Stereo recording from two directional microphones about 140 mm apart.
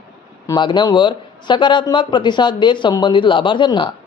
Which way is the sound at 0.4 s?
30° left (ahead or behind).